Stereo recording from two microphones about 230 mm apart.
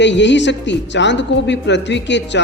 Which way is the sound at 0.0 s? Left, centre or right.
Left.